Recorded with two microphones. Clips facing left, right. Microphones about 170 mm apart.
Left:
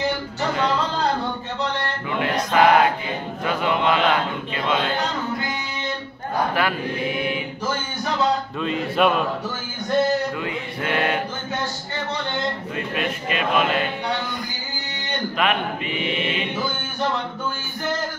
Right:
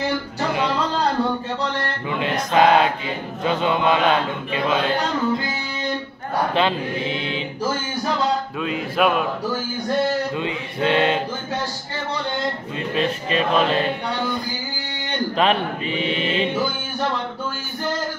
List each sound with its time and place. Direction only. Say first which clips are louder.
2.0 s music: left 1 dB; 20° right (ahead or behind)
3.4 s chant: right 2 dB; 25° right (ahead or behind)
6.5 s chant: right 3 dB; 25° right (ahead or behind)
8.5 s a sound: even; 5° right (ahead or behind)
10.3 s chant: right 2 dB; 20° right (ahead or behind)
12.9 s music: right 5 dB; 30° right (ahead or behind)
15.3 s a man's voice: right 3 dB; 30° right (ahead or behind)